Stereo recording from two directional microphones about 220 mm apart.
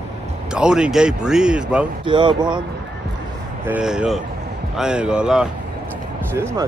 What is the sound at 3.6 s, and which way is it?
Speech, 5° right (ahead or behind).